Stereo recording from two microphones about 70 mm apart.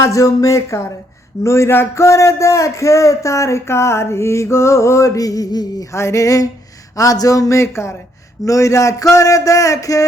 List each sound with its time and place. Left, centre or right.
0.0 s speech: left
5.9 s speech: left